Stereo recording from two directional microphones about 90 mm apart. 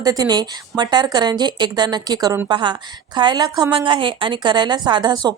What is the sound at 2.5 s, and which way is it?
A woman's voice, 60° right (ahead or behind).